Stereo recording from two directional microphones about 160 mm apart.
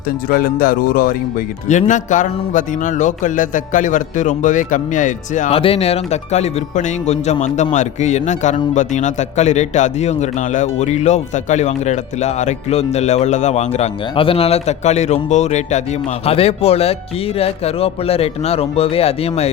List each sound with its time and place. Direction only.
0.3 s speech: 65° left (ahead or behind)
1.6 s speech: 50° left (ahead or behind)
5.5 s speech: 35° left (ahead or behind)